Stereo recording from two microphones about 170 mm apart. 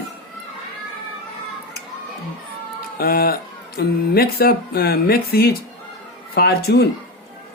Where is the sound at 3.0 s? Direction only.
65° left (ahead or behind).